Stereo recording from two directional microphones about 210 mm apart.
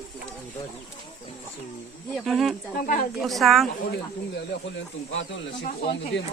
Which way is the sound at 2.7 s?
40° left (ahead or behind).